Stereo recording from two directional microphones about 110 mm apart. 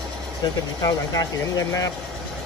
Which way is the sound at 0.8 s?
35° left (ahead or behind).